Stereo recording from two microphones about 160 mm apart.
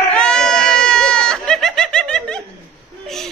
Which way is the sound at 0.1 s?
5° left (ahead or behind).